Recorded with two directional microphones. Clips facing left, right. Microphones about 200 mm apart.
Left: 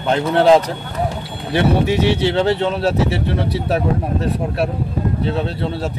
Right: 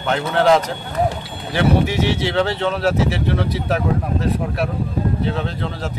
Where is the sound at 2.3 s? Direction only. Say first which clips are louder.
Left 2 dB; 30° left (ahead or behind).